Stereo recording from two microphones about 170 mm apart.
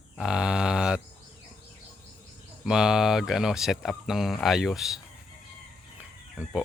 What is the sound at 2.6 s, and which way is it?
Speech, 5° right (ahead or behind).